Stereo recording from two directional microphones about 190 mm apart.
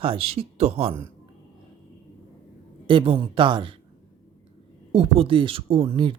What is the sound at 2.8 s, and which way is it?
Speech, 30° right (ahead or behind).